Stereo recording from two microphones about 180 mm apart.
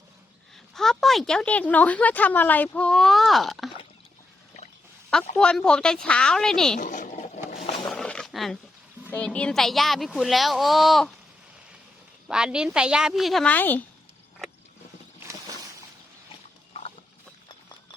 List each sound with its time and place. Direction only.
0.5 s a woman's voice: centre (ahead or behind)
5.4 s a woman's voice: 5° left (ahead or behind)
6.7 s a sound: 45° left (ahead or behind)
7.9 s a sound: 5° left (ahead or behind)
9.1 s a woman's voice: 5° left (ahead or behind)
12.3 s a woman's voice: 5° right (ahead or behind)